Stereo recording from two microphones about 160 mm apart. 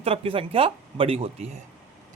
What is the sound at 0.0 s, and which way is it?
Speech, 35° right (ahead or behind).